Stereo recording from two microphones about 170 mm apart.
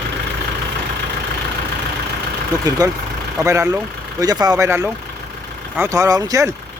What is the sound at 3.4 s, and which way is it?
Speech, 15° right (ahead or behind).